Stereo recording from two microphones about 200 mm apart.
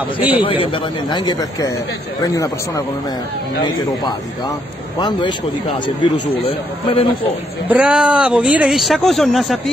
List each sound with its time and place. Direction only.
0.4 s a man's voice: 25° left (ahead or behind)
4.9 s a man's voice: 20° left (ahead or behind)
7.7 s speech: 5° right (ahead or behind)